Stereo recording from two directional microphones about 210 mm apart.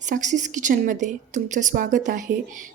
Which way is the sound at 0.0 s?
35° right (ahead or behind).